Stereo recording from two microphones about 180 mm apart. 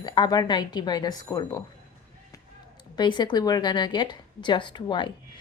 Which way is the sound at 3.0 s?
25° left (ahead or behind).